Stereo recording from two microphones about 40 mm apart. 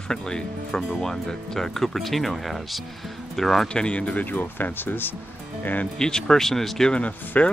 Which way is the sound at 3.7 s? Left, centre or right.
Left.